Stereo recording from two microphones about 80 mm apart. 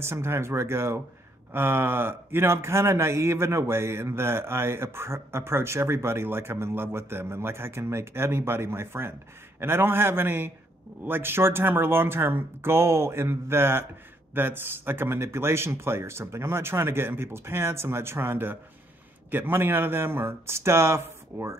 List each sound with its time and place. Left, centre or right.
0.0 s speech: right